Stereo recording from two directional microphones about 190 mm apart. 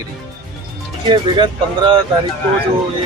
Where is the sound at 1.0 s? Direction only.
25° right (ahead or behind).